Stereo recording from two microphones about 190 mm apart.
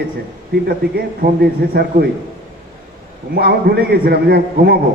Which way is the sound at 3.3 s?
55° right (ahead or behind).